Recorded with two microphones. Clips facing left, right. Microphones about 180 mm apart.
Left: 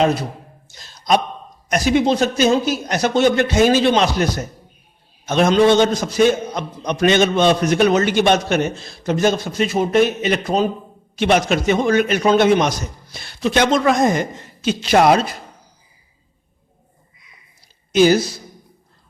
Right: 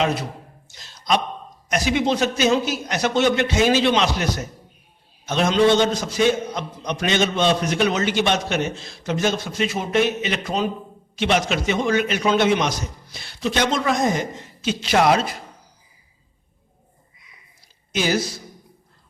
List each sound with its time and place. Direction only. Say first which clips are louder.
0.7 s a sound: left 4 dB; 45° left (ahead or behind)
1.7 s a man's voice: left 4 dB; 40° left (ahead or behind)
17.9 s speech: left 9 dB; 40° left (ahead or behind)